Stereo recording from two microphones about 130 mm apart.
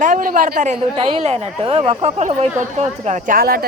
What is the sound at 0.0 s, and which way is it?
Speech, 85° right.